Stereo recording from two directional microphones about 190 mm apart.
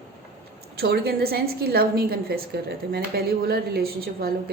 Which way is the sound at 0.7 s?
55° right (ahead or behind).